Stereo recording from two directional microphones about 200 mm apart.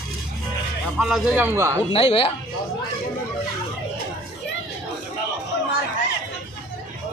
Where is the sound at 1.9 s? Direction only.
30° left (ahead or behind).